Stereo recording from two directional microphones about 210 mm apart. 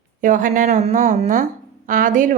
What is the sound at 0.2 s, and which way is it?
A woman's voice, 40° right (ahead or behind).